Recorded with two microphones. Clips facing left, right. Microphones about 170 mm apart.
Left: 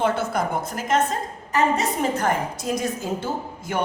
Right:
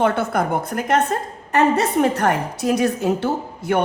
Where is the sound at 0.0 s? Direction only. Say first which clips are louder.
Right 4 dB; 60° right (ahead or behind).